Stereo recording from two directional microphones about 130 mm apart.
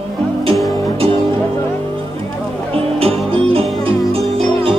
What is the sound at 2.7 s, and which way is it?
Music, 50° right (ahead or behind).